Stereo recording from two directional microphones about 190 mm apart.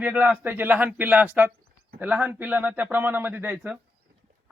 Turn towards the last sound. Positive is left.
turn(degrees=-5)  # may be behind; listen again after turning